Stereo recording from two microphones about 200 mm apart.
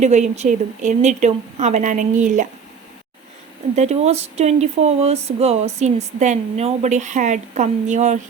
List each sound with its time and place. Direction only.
0.0 s speech: 35° right (ahead or behind)
3.8 s speech: 35° right (ahead or behind)